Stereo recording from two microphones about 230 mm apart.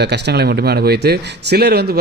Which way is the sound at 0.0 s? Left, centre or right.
Right.